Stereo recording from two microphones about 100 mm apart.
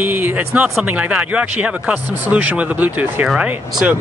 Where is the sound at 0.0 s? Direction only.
20° right (ahead or behind).